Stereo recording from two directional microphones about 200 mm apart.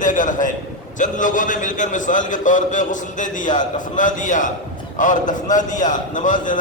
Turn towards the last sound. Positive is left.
turn(degrees=40)  # may be behind; listen again after turning